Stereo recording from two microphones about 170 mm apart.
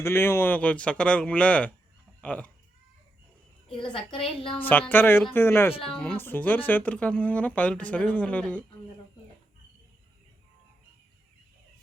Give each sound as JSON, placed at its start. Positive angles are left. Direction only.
{"t": 0.0, "sound": "speech", "side_deg": 15}
{"t": 3.7, "sound": "a woman's voice", "side_deg": 30}
{"t": 4.6, "sound": "speech", "side_deg": 10}